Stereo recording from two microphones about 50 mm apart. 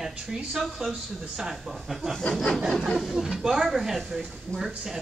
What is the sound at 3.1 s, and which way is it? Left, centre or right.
Speech, centre.